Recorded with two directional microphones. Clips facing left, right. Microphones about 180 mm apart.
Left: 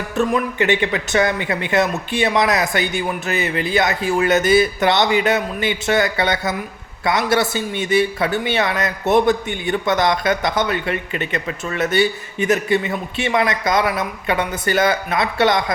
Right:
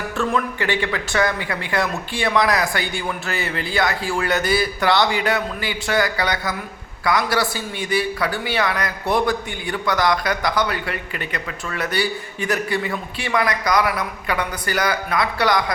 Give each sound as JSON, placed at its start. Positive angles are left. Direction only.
{"t": 0.2, "sound": "a man's voice", "side_deg": 20}